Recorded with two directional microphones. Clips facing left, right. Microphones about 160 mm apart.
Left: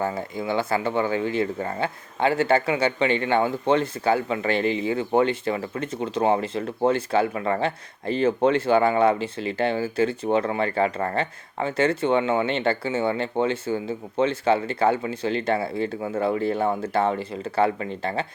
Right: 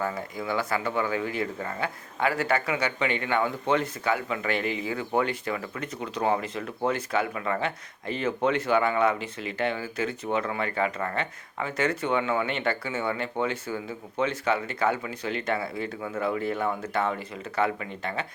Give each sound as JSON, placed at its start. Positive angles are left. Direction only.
{"t": 0.0, "sound": "speech", "side_deg": 30}